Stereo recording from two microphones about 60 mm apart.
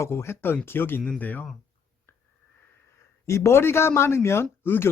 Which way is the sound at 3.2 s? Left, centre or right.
Left.